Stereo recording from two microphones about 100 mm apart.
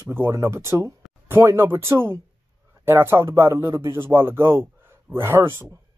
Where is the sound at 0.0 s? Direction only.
25° right (ahead or behind).